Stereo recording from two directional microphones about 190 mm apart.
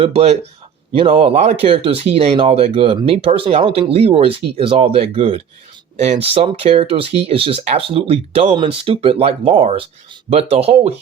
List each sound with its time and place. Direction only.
0.0 s speech: 30° right (ahead or behind)